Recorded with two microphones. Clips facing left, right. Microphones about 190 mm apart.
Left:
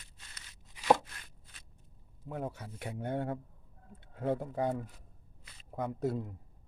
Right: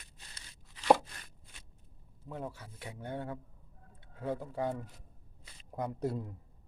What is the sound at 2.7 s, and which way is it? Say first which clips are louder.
Speech: left 7 dB; 55° left (ahead or behind).